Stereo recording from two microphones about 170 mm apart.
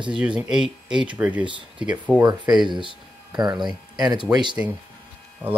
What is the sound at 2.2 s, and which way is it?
Speech, 25° right (ahead or behind).